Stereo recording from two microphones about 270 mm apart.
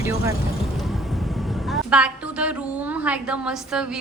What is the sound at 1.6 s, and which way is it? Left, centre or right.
A woman's voice, centre.